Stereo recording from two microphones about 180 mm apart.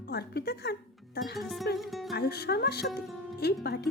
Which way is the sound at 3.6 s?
65° left (ahead or behind).